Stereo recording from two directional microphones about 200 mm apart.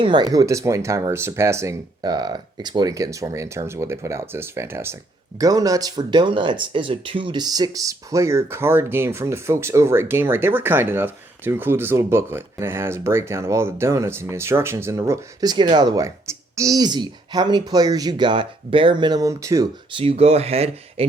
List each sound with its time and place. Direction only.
0.0 s speech: 20° right (ahead or behind)